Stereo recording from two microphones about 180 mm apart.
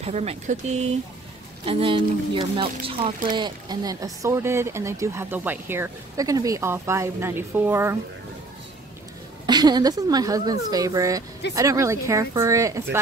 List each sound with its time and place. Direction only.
0.0 s speech: 35° right (ahead or behind); by 8.0 s 15° right (ahead or behind)
9.5 s speech: 25° right (ahead or behind)